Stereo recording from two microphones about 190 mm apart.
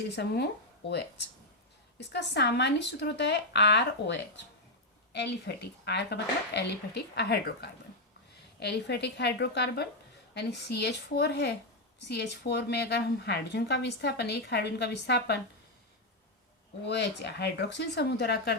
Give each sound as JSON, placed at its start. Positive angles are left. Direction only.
{"t": 0.2, "sound": "a woman's voice", "side_deg": 60}
{"t": 16.8, "sound": "a woman's voice", "side_deg": 60}